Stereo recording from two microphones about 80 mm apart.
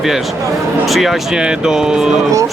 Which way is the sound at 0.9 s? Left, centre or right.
Centre.